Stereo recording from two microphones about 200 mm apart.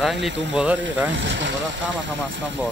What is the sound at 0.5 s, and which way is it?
Speech, 5° right (ahead or behind).